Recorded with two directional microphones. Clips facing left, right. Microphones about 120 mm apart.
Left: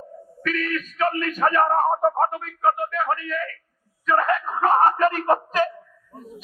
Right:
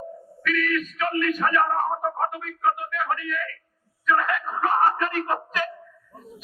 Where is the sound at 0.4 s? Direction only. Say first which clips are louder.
Right 1 dB; 35° left (ahead or behind).